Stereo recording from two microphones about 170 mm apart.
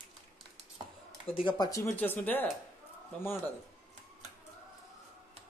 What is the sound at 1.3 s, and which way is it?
Speech, 25° left (ahead or behind).